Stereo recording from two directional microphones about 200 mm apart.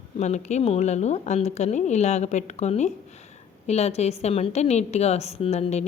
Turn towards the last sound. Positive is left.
turn(degrees=35)  # may be behind; listen again after turning